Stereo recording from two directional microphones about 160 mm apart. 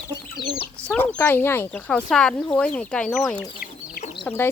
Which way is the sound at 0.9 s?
10° left (ahead or behind).